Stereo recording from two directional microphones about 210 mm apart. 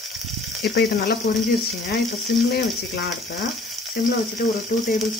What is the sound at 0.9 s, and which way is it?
Speech, 45° left (ahead or behind).